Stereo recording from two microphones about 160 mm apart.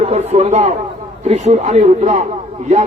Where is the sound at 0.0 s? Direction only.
40° right (ahead or behind).